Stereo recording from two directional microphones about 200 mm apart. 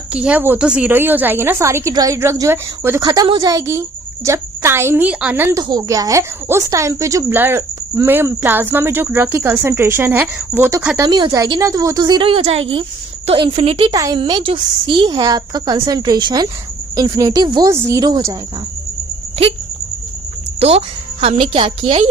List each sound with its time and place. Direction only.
0.1 s a woman's voice: 5° right (ahead or behind)
20.6 s a woman's voice: 30° right (ahead or behind)